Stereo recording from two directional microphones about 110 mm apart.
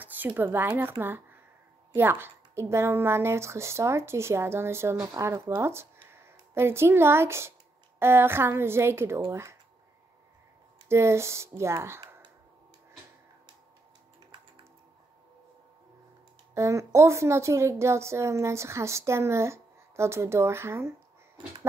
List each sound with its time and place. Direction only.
0.0 s a sound: 15° right (ahead or behind)
0.4 s a woman's voice: 20° right (ahead or behind)
10.9 s a woman's voice: 25° right (ahead or behind)
16.5 s a woman's voice: 30° right (ahead or behind)